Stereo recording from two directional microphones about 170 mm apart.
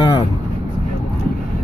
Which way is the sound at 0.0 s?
25° left (ahead or behind).